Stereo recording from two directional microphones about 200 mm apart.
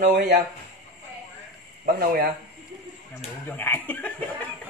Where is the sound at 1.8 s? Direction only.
45° right (ahead or behind).